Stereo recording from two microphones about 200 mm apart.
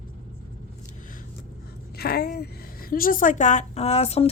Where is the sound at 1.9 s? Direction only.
50° left (ahead or behind).